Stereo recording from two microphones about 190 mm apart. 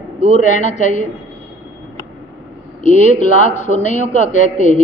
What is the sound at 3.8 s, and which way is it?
Speech, 40° left (ahead or behind).